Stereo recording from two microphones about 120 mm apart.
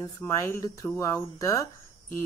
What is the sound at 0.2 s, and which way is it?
A woman's voice, 25° left (ahead or behind).